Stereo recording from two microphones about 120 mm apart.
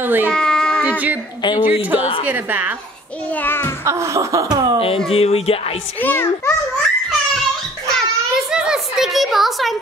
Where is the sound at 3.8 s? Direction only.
25° right (ahead or behind).